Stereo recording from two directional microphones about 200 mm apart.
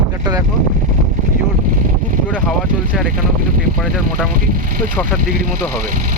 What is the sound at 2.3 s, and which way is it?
Speech, 5° right (ahead or behind).